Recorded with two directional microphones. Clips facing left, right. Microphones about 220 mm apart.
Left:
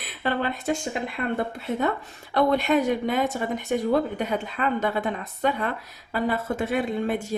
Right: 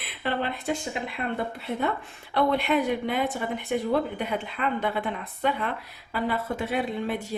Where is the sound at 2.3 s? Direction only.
45° left (ahead or behind).